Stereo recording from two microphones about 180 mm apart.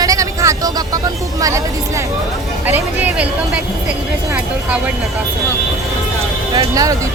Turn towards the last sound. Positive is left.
turn(degrees=-20)  # may be behind; listen again after turning